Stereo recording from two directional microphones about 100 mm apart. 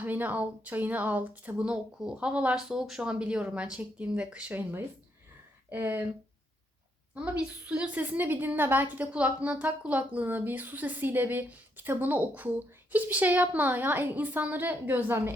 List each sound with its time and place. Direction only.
0.0 s a woman's voice: 15° right (ahead or behind)
7.1 s a woman's voice: 15° right (ahead or behind)